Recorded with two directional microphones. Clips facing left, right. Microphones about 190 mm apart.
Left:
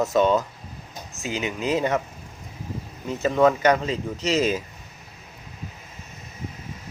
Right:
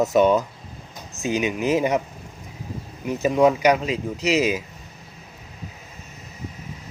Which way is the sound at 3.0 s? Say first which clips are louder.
Right 1 dB; 15° right (ahead or behind).